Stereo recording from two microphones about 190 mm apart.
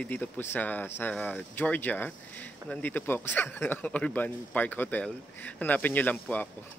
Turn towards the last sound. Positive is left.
turn(degrees=10)  # may be behind; listen again after turning